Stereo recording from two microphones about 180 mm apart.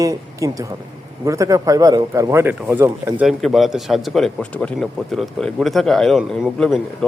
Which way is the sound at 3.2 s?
Centre (ahead or behind).